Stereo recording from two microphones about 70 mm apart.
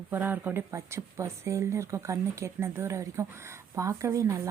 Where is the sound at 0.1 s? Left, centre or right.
Right.